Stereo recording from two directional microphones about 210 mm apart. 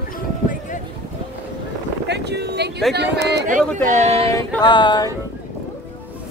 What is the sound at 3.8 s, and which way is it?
Speech, 35° right (ahead or behind).